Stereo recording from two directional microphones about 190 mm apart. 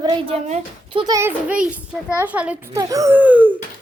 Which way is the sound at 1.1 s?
10° right (ahead or behind).